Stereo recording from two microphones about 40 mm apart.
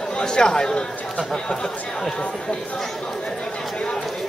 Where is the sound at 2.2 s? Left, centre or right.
Left.